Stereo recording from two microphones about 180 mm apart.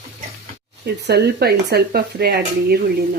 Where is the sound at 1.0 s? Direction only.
65° right (ahead or behind).